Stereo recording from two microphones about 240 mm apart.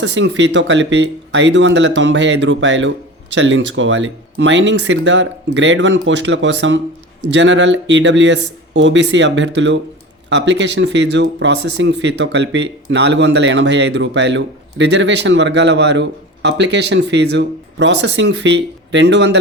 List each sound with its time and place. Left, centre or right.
0.0 s speech: right